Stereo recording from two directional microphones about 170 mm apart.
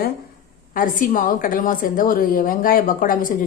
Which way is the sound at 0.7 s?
55° left (ahead or behind).